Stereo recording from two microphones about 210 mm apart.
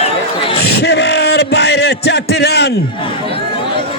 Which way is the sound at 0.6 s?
50° left (ahead or behind).